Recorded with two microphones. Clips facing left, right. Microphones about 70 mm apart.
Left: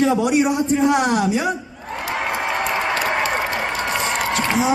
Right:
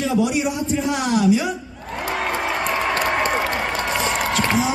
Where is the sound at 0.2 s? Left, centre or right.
Left.